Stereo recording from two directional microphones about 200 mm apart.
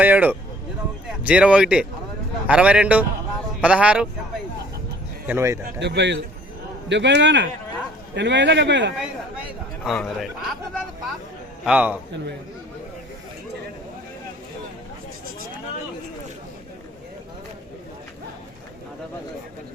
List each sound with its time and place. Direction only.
0.0 s speech: 10° right (ahead or behind)
5.3 s speech: 15° right (ahead or behind)
5.8 s a man's voice: 60° right (ahead or behind)
9.8 s speech: centre (ahead or behind)
11.6 s speech: 5° right (ahead or behind)